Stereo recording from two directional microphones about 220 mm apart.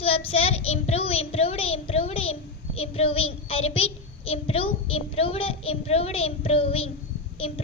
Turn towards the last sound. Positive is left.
turn(degrees=25)  # may be behind; listen again after turning